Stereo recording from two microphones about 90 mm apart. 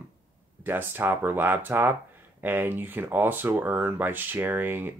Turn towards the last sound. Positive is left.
turn(degrees=-25)  # may be behind; listen again after turning